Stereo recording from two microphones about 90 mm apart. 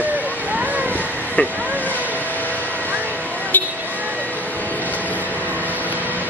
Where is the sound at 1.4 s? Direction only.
15° left (ahead or behind).